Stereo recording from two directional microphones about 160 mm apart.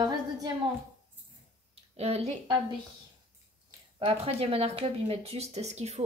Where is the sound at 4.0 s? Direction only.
35° right (ahead or behind).